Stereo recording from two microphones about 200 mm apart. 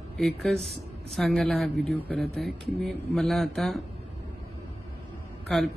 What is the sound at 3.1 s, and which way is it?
Speech, centre (ahead or behind).